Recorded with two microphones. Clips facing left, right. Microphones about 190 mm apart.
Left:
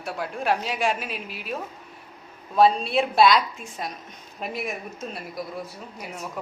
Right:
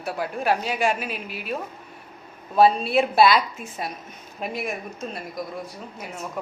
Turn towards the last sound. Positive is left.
turn(degrees=0)  # may be behind; listen again after turning